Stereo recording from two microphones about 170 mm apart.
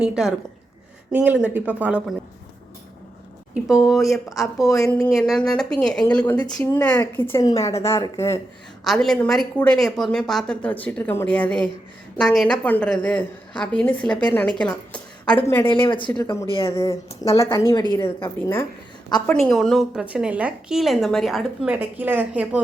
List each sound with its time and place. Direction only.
0.0 s a woman's voice: 5° right (ahead or behind)
3.5 s a woman's voice: 5° right (ahead or behind); by 8.4 s 20° left (ahead or behind)
8.8 s a woman's voice: centre (ahead or behind)
15.9 s a woman's voice: 30° left (ahead or behind)
18.2 s a woman's voice: 15° left (ahead or behind); by 22.6 s 10° right (ahead or behind)